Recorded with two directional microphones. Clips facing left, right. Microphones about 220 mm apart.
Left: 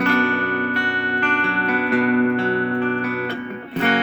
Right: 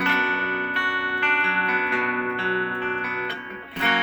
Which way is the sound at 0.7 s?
45° left (ahead or behind).